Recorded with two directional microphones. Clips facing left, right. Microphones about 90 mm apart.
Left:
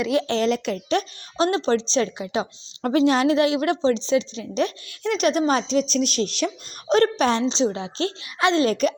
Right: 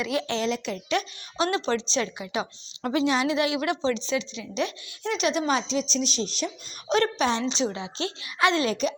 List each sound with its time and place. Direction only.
0.0 s a woman's voice: 30° left (ahead or behind)
0.4 s speech: 50° left (ahead or behind)
0.9 s a woman's voice: 35° left (ahead or behind)
2.8 s a woman's voice: 45° left (ahead or behind)
4.9 s speech: 50° left (ahead or behind); by 6.5 s 70° left (ahead or behind)
6.8 s speech: 40° left (ahead or behind)
7.4 s a woman's voice: 30° left (ahead or behind)
8.4 s speech: 25° left (ahead or behind)
8.6 s speech: 50° left (ahead or behind)